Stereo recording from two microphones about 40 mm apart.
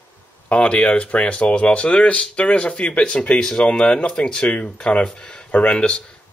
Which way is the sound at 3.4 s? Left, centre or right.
Left.